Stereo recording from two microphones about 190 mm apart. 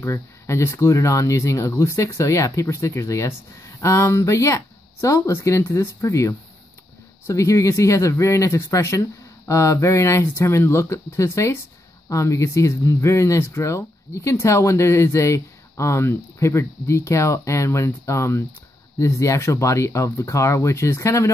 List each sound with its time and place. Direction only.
0.0 s speech: 15° left (ahead or behind)